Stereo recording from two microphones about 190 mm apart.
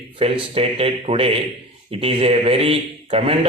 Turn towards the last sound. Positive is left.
turn(degrees=-30)  # may be behind; listen again after turning